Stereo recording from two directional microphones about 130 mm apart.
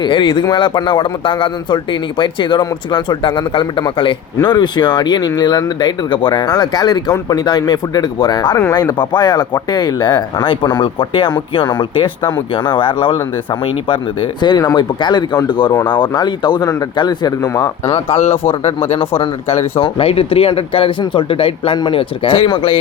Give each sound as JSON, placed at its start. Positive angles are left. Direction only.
{"t": 0.0, "sound": "speech", "side_deg": 35}
{"t": 17.8, "sound": "speech", "side_deg": 50}
{"t": 18.9, "sound": "speech", "side_deg": 40}